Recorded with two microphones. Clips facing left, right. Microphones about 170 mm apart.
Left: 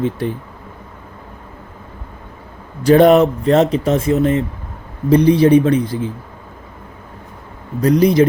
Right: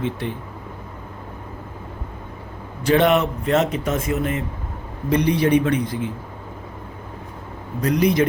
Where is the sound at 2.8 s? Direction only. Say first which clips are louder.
Left 8 dB; 40° left (ahead or behind).